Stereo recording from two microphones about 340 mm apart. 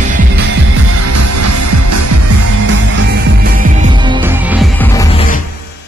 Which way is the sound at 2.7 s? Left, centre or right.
Right.